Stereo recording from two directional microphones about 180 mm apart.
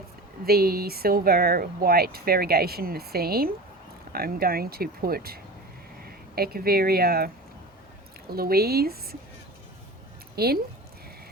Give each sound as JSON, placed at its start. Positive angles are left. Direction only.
{"t": 0.4, "sound": "speech", "side_deg": -60}
{"t": 8.3, "sound": "speech", "side_deg": -60}
{"t": 10.3, "sound": "speech", "side_deg": -60}